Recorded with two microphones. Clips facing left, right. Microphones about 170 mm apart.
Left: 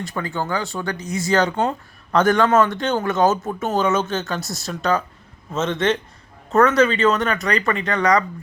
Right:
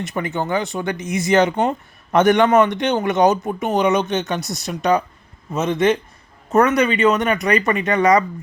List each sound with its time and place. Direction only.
0.0 s speech: 20° right (ahead or behind)